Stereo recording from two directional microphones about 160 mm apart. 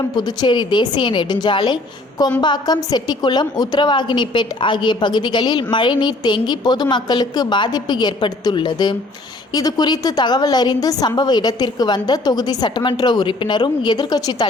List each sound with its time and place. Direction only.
0.2 s a woman's voice: 25° left (ahead or behind)